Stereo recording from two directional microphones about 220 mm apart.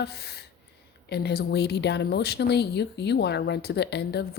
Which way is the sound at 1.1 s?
45° left (ahead or behind).